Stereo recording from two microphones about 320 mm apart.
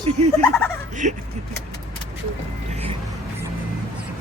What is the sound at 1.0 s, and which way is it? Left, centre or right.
Speech, right.